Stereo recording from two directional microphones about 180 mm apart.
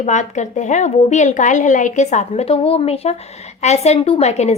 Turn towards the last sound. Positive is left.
turn(degrees=40)  # may be behind; listen again after turning